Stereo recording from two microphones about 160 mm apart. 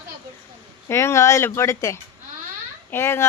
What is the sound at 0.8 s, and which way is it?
Speech, 15° left (ahead or behind).